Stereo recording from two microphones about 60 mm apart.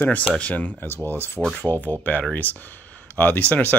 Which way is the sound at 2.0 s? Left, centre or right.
Left.